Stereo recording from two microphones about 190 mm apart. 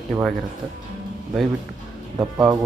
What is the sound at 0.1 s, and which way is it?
Speech, 5° right (ahead or behind).